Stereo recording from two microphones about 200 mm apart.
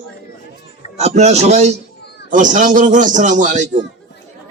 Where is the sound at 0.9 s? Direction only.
35° right (ahead or behind).